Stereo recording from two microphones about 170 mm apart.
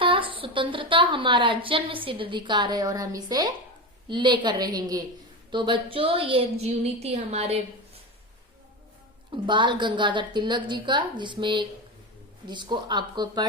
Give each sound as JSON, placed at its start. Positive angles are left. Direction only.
{"t": 0.0, "sound": "a woman's voice", "side_deg": -30}
{"t": 9.3, "sound": "a woman's voice", "side_deg": -30}